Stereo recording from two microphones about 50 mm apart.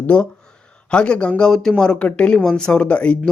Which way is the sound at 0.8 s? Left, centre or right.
Left.